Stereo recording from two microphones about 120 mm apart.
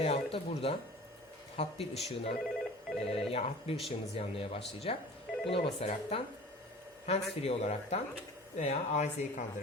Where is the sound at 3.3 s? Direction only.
60° left (ahead or behind).